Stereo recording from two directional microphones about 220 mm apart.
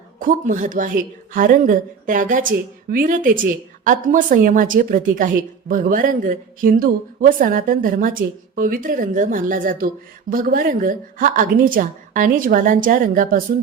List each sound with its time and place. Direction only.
0.2 s a woman's voice: 40° right (ahead or behind)